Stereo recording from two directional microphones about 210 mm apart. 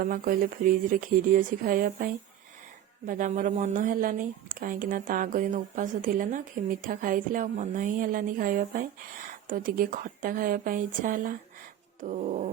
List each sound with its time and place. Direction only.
0.0 s speech: 45° right (ahead or behind)